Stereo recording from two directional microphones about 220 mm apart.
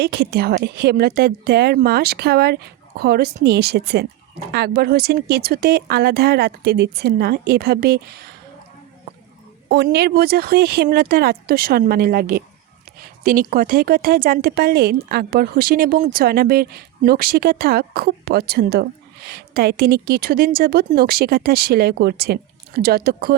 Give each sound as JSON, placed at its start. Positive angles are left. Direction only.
{"t": 0.0, "sound": "speech", "side_deg": -50}
{"t": 9.6, "sound": "speech", "side_deg": -50}